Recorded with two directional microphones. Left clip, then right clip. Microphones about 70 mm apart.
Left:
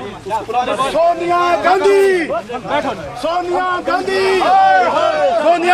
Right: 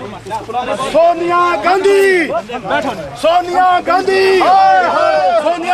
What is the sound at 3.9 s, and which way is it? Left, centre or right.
A man's voice, centre.